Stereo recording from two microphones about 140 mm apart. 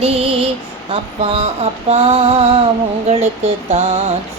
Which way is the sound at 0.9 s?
50° right (ahead or behind).